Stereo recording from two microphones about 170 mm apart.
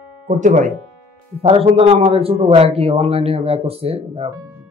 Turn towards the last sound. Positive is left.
turn(degrees=-35)  # may be behind; listen again after turning